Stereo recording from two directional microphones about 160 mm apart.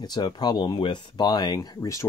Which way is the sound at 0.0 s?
25° left (ahead or behind).